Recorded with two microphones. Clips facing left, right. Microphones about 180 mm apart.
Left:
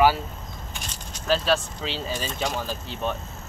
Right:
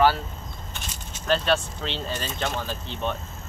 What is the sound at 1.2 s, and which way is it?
Speech, centre (ahead or behind).